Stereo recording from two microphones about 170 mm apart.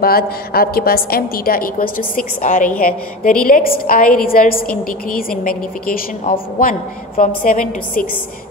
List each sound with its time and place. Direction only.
0.0 s a woman's voice: 60° left (ahead or behind)